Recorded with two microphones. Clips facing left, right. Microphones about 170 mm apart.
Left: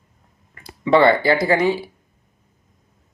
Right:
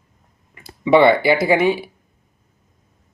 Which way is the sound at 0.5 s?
20° right (ahead or behind).